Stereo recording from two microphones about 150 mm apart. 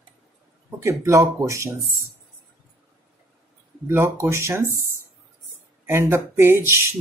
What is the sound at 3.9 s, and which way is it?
Speech, 15° right (ahead or behind).